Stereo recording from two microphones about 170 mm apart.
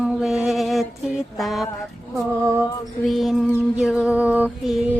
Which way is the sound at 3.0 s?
Centre (ahead or behind).